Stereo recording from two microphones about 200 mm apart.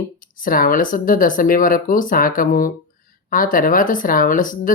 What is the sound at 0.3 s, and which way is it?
Speech, 45° left (ahead or behind).